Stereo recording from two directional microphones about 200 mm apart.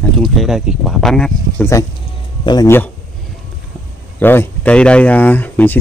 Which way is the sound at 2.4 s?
20° left (ahead or behind).